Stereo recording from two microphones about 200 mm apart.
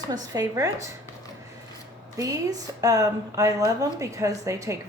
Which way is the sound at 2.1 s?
15° right (ahead or behind).